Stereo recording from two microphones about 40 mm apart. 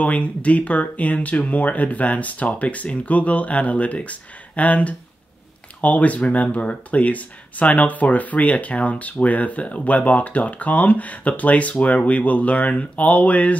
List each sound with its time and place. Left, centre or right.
0.0 s speech: left